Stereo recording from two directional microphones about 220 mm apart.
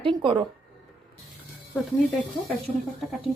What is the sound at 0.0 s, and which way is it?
Speech, 20° right (ahead or behind).